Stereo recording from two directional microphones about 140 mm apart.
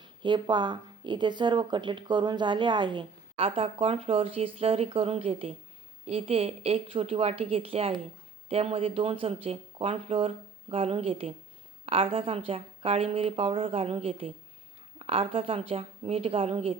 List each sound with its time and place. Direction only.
0.0 s speech: 35° right (ahead or behind)